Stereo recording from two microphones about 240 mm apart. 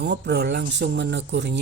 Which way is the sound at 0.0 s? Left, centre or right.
Right.